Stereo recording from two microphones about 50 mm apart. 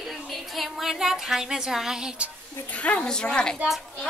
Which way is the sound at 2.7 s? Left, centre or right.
Left.